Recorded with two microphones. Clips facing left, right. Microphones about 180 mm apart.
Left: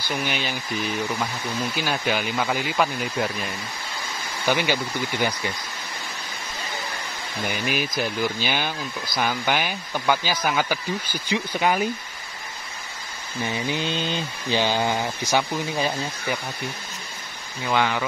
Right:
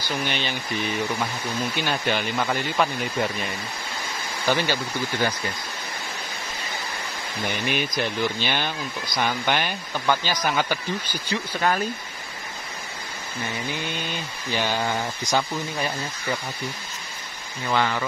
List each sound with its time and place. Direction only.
0.3 s speech: 5° left (ahead or behind)
4.5 s speech: 15° left (ahead or behind)
7.4 s speech: 5° left (ahead or behind)
13.5 s mantra: 25° left (ahead or behind)
17.7 s speech: 10° left (ahead or behind)